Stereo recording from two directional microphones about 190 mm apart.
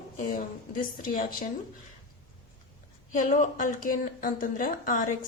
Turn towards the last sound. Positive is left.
turn(degrees=45)  # may be behind; listen again after turning